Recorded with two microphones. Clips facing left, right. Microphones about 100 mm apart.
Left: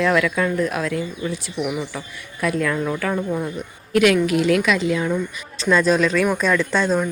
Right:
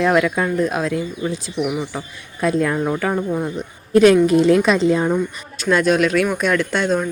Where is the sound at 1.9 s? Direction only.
25° right (ahead or behind).